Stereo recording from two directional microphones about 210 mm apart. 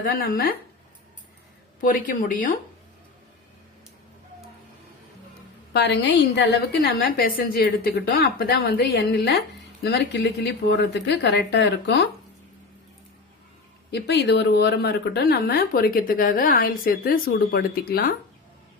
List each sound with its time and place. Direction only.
0.0 s speech: 45° left (ahead or behind)
1.8 s speech: 40° left (ahead or behind)
5.7 s speech: 55° left (ahead or behind)
13.9 s speech: 55° left (ahead or behind)